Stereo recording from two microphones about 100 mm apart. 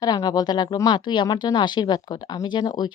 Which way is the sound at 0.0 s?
40° left (ahead or behind).